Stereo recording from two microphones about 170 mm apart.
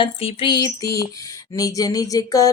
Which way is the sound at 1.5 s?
20° left (ahead or behind).